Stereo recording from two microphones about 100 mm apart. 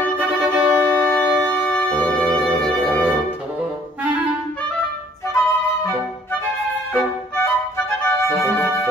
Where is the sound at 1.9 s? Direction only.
15° left (ahead or behind).